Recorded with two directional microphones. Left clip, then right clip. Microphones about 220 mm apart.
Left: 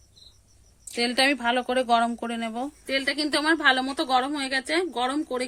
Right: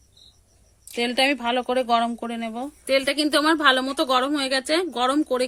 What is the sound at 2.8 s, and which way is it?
A woman's voice, 45° right (ahead or behind).